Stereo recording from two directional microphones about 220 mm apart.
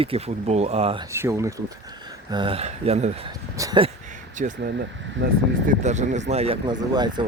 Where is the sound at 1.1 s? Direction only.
10° right (ahead or behind).